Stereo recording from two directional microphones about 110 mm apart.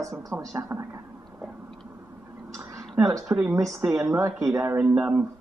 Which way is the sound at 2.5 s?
30° right (ahead or behind).